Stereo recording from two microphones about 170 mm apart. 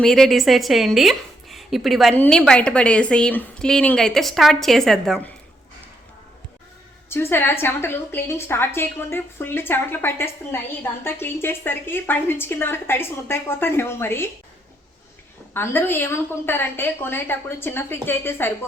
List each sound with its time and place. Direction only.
0.0 s a woman's voice: centre (ahead or behind)
7.1 s a woman's voice: 15° left (ahead or behind)
15.5 s a woman's voice: 15° left (ahead or behind)